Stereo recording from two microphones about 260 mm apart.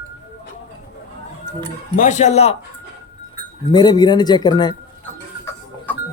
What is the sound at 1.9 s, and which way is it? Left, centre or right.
Speech, left.